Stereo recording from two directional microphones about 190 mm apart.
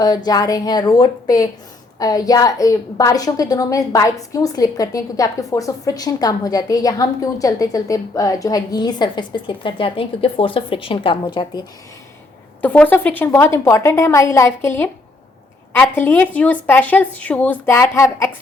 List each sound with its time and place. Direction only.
0.0 s a woman's voice: 20° left (ahead or behind)
12.6 s a woman's voice: 10° left (ahead or behind)